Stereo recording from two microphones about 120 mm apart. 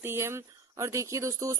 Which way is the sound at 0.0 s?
20° right (ahead or behind).